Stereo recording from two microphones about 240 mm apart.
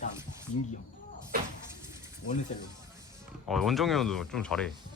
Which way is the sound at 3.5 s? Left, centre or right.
Centre.